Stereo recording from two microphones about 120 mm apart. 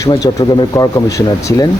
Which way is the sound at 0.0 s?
30° left (ahead or behind).